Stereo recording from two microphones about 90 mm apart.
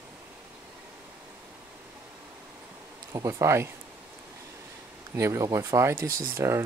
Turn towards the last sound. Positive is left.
turn(degrees=-35)  # may be behind; listen again after turning